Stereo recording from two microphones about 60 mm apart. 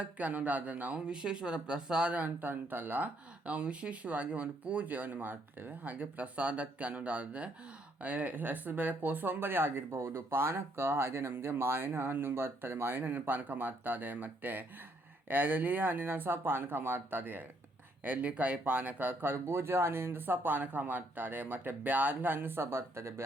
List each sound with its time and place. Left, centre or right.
0.0 s speech: right